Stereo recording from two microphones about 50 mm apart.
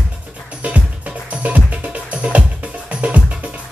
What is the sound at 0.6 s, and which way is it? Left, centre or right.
Music, right.